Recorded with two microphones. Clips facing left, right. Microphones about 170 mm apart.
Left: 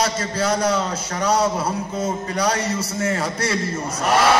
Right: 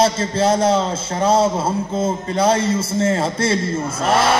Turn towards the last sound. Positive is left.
turn(degrees=-25)  # may be behind; listen again after turning